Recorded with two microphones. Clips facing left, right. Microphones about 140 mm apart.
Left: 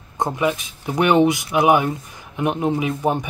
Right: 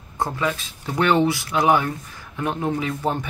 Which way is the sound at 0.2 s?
20° left (ahead or behind).